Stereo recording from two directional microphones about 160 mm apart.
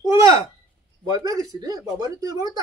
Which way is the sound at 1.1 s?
20° right (ahead or behind).